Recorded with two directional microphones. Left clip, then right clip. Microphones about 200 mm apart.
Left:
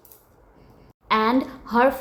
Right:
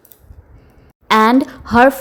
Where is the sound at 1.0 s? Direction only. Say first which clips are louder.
Right 9 dB; 40° right (ahead or behind).